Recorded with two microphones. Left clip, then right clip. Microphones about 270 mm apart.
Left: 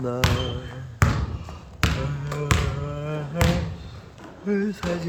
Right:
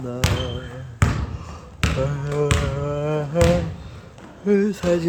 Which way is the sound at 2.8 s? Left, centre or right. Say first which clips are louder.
Right 8 dB; right.